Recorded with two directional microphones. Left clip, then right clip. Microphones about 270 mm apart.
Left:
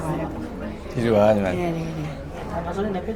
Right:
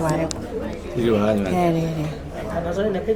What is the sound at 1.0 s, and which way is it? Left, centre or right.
Speech, left.